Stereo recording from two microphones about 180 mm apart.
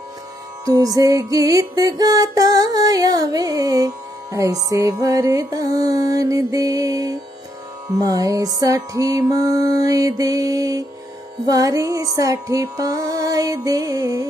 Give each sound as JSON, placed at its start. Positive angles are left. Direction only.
{"t": 0.7, "sound": "music", "side_deg": -20}